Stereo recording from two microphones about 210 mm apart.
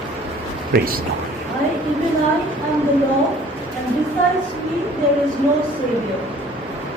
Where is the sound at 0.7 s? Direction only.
45° right (ahead or behind).